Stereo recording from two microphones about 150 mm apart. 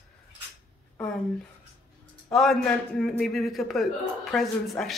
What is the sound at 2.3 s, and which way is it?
A man's voice, centre (ahead or behind).